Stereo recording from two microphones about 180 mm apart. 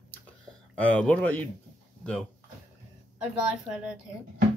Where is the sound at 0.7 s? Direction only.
10° left (ahead or behind).